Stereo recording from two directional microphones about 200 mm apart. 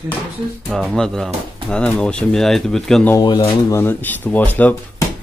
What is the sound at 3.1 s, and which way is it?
A man's voice, 20° left (ahead or behind).